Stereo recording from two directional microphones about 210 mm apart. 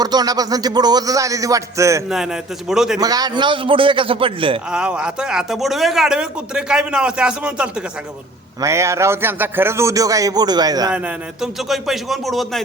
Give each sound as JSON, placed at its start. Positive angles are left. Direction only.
{"t": 0.0, "sound": "a man's voice", "side_deg": -20}
{"t": 2.0, "sound": "a man's voice", "side_deg": 0}
{"t": 3.0, "sound": "a man's voice", "side_deg": -20}
{"t": 4.7, "sound": "a man's voice", "side_deg": -5}
{"t": 11.7, "sound": "a man's voice", "side_deg": 0}